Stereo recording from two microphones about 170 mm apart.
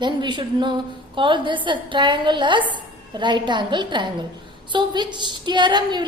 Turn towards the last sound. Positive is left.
turn(degrees=-25)  # may be behind; listen again after turning